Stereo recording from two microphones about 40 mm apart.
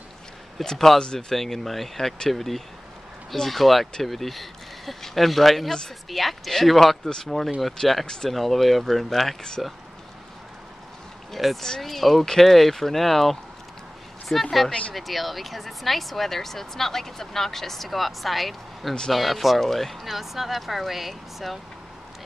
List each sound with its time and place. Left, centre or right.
0.7 s speech: centre
11.6 s speech: centre
14.7 s speech: left
15.0 s speech: centre